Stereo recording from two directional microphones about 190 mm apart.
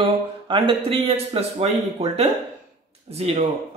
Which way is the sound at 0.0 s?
25° right (ahead or behind).